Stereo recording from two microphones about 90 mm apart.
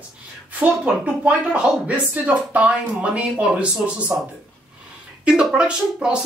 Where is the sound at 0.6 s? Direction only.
15° right (ahead or behind).